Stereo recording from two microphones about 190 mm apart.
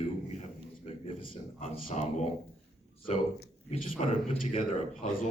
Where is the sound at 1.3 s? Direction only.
35° left (ahead or behind).